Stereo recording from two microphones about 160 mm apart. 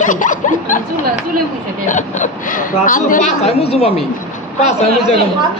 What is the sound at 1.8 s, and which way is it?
Speech, 55° left (ahead or behind).